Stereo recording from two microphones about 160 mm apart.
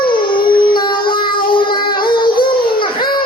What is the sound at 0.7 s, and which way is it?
Child singing, 30° left (ahead or behind).